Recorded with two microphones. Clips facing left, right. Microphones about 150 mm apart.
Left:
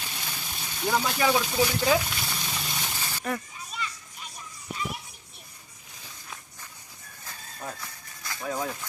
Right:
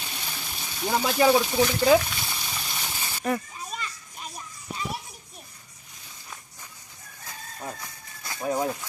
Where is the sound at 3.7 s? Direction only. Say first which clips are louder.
Left 1 dB; 45° right (ahead or behind).